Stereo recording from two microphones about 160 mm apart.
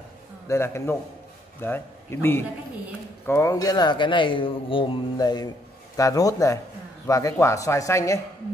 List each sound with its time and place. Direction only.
0.5 s speech: 15° left (ahead or behind)